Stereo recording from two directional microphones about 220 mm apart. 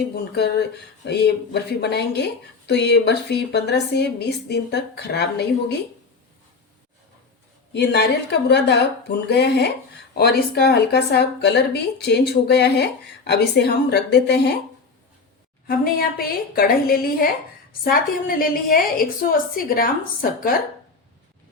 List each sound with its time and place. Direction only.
0.3 s speech: 50° left (ahead or behind)
7.7 s speech: 50° left (ahead or behind)
15.6 s a woman's voice: 40° left (ahead or behind)